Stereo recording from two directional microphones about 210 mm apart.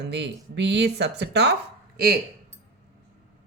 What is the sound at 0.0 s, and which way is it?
Speech, 55° right (ahead or behind).